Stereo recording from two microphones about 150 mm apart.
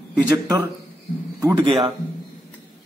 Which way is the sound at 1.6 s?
40° right (ahead or behind).